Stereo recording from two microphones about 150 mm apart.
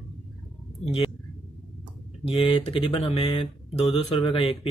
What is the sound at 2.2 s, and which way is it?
Speech, 40° left (ahead or behind).